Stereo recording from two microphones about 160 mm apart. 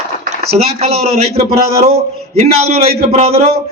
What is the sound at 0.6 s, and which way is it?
A man's voice, 40° right (ahead or behind).